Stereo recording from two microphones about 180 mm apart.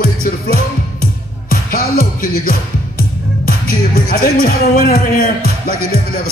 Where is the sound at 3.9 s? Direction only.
55° left (ahead or behind).